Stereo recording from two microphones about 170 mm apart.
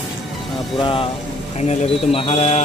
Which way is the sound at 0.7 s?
30° left (ahead or behind).